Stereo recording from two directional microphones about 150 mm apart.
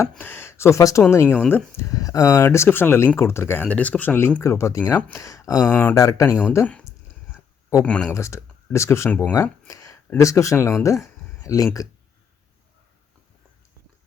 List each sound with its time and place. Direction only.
0.2 s speech: 15° left (ahead or behind)
8.1 s speech: 20° left (ahead or behind)
9.3 s a sound: 20° left (ahead or behind)
10.1 s speech: 20° left (ahead or behind)